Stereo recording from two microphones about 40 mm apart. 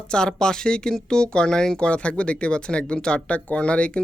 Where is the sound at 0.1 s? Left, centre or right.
Centre.